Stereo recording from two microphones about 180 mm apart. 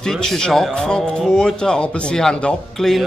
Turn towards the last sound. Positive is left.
turn(degrees=0)  # may be behind; listen again after turning